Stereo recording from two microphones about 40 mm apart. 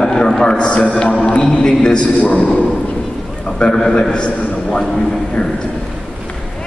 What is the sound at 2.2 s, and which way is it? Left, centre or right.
Speech, left.